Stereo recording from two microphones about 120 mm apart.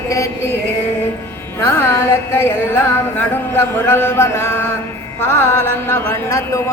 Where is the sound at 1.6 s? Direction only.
20° left (ahead or behind).